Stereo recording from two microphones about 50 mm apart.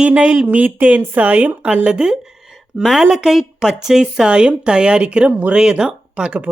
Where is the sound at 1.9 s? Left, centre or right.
Centre.